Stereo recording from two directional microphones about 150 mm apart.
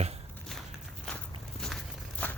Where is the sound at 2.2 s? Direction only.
10° left (ahead or behind).